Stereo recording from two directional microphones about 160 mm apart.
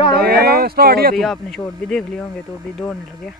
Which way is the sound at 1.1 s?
Centre (ahead or behind).